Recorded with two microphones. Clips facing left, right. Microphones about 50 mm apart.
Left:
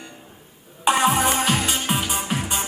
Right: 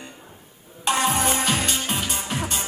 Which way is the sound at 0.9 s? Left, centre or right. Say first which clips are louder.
Left 3 dB; centre.